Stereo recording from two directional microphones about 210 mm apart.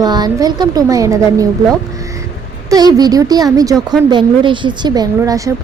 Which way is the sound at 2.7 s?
20° right (ahead or behind).